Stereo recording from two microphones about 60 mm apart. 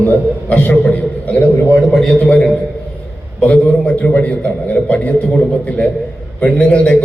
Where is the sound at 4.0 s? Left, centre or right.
Left.